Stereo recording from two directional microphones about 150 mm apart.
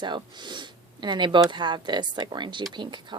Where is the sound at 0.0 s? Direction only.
30° right (ahead or behind).